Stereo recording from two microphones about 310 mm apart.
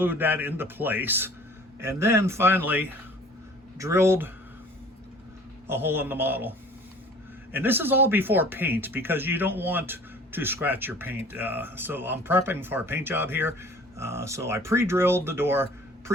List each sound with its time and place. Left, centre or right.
0.0 s speech: centre
5.6 s speech: centre
7.5 s speech: centre